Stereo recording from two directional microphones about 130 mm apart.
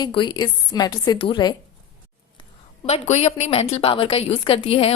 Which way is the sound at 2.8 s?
55° left (ahead or behind).